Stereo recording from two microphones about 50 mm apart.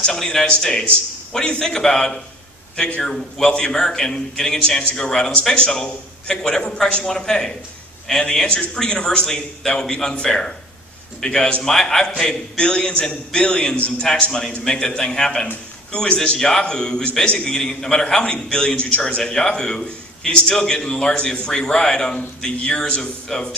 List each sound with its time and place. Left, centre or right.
0.0 s a man's voice: centre
11.6 s a man's voice: centre